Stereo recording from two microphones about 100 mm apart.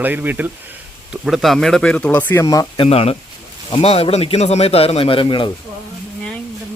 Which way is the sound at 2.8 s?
80° left.